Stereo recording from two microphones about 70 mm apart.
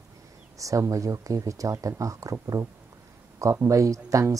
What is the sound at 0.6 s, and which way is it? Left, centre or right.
Speech, right.